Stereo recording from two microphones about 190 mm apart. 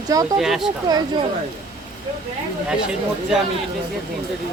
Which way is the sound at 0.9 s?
20° right (ahead or behind).